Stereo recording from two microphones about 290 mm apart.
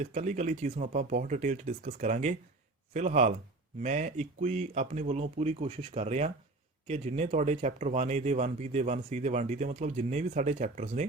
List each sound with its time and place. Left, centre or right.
0.0 s speech: right